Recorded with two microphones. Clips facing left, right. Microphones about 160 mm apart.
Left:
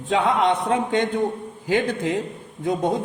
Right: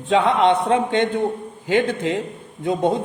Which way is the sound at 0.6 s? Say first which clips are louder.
Right 3 dB; 25° right (ahead or behind).